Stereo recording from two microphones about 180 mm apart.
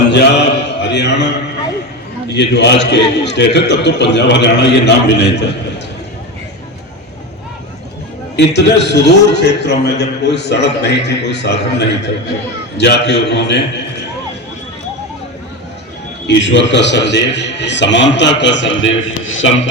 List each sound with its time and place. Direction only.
0.1 s mantra: 70° left (ahead or behind)
2.3 s a man's voice: 70° left (ahead or behind)
8.4 s a man's voice: 70° left (ahead or behind)
16.2 s a man's voice: 80° left